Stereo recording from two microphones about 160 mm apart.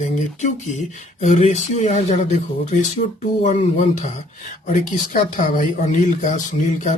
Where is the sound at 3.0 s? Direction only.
55° left (ahead or behind).